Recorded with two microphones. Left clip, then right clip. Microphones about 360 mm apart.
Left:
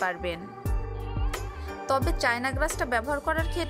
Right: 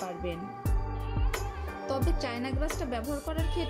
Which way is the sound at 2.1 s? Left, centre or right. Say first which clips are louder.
Left 7 dB; centre.